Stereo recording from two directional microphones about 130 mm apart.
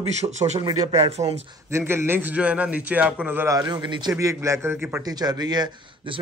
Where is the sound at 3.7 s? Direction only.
35° right (ahead or behind); by 5.0 s 20° right (ahead or behind).